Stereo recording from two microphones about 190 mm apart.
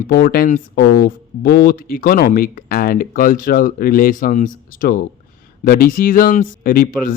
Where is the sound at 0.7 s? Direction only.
60° left (ahead or behind).